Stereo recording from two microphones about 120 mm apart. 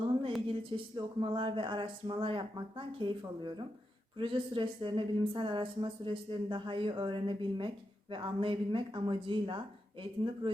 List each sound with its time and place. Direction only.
0.4 s speech: 45° right (ahead or behind)